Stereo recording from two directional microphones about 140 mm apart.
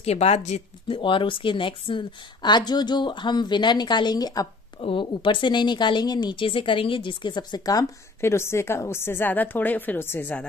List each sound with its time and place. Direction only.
0.0 s speech: 50° left (ahead or behind)
0.8 s a woman's voice: 40° left (ahead or behind); by 10.4 s 15° left (ahead or behind)